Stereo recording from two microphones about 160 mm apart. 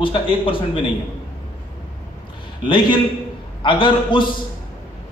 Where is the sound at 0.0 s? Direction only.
30° left (ahead or behind).